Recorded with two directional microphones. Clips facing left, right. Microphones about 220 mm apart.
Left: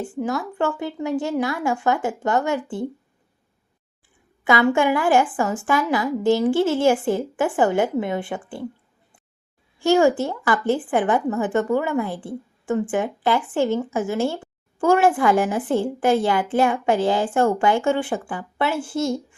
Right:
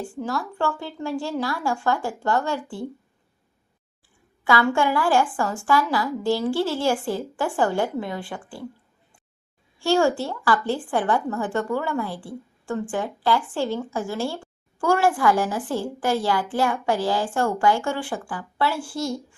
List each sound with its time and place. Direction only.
0.0 s a woman's voice: 20° left (ahead or behind)
4.4 s a woman's voice: 20° left (ahead or behind)
9.7 s a woman's voice: 20° left (ahead or behind)